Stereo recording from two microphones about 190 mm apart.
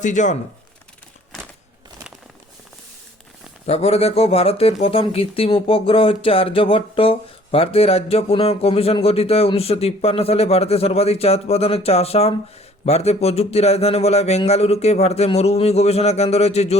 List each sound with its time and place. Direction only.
0.0 s speech: 40° left (ahead or behind)
3.7 s speech: 35° left (ahead or behind)